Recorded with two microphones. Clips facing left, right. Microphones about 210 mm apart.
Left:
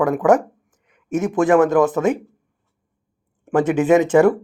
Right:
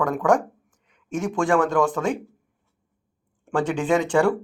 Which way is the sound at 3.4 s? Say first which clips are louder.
Left 7 dB; 10° left (ahead or behind).